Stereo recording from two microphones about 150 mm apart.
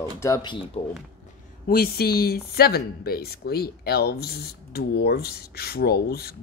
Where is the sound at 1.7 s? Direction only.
90° left.